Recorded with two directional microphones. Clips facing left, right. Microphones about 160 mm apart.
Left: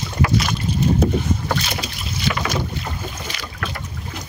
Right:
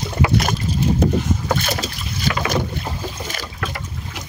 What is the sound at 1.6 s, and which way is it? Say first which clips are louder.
Boat: right 3 dB; 40° right (ahead or behind).